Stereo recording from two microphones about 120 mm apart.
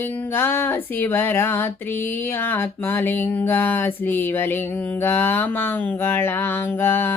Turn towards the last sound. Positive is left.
turn(degrees=20)  # may be behind; listen again after turning